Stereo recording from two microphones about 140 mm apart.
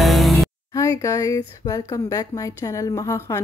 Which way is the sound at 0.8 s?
25° left (ahead or behind).